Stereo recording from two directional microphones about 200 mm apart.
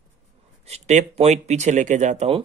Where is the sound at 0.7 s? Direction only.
35° right (ahead or behind).